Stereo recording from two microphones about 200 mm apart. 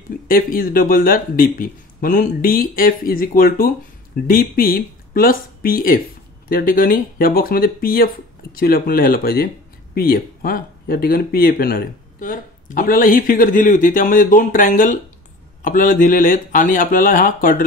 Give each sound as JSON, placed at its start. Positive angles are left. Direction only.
{"t": 0.3, "sound": "speech", "side_deg": 45}